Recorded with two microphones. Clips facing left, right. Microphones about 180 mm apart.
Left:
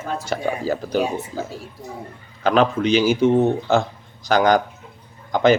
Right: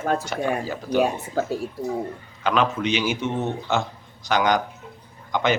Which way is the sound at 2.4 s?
40° left (ahead or behind).